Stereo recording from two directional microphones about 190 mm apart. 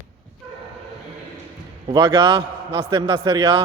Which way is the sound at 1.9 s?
25° right (ahead or behind).